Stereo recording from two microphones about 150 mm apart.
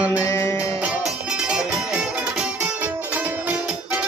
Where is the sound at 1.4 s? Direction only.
5° right (ahead or behind).